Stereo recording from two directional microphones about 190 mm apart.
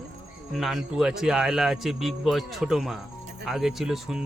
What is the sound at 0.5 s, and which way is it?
Speech, centre (ahead or behind).